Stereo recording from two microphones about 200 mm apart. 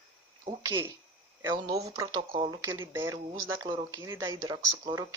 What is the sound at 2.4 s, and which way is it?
Speech, 20° right (ahead or behind).